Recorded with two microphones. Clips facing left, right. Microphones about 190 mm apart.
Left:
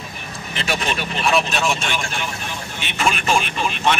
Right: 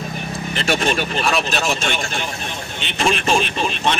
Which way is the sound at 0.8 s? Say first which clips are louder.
Right 3 dB; 40° right (ahead or behind).